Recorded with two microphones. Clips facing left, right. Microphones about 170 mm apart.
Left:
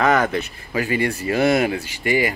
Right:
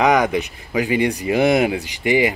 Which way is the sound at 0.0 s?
15° right (ahead or behind).